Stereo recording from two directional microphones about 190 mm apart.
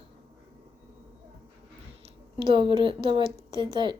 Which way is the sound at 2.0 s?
25° right (ahead or behind).